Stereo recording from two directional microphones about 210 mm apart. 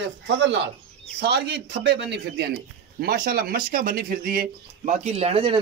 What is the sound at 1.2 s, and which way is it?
Speech, 55° right (ahead or behind).